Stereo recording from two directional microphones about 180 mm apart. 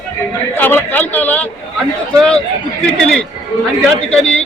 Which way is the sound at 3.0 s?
5° left (ahead or behind).